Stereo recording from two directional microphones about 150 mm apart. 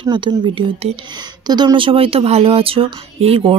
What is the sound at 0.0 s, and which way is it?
A woman's voice, 30° right (ahead or behind).